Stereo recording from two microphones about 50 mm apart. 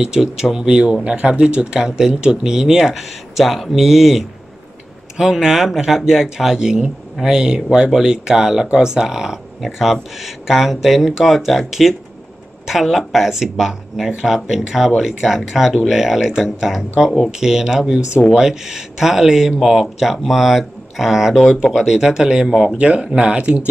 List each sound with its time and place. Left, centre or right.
0.0 s speech: centre